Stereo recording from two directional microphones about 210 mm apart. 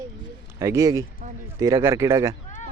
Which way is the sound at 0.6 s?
15° right (ahead or behind).